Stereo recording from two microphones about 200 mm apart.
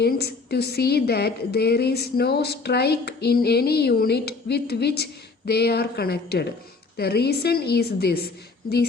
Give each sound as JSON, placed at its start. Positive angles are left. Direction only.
{"t": 0.0, "sound": "a woman's voice", "side_deg": 55}